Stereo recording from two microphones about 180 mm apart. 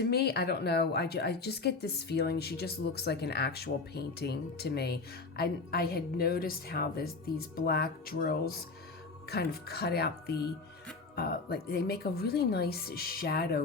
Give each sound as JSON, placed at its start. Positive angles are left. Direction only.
{"t": 0.0, "sound": "a woman's voice", "side_deg": 65}